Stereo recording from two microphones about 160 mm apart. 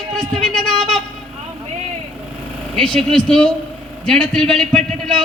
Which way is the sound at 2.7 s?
5° left (ahead or behind).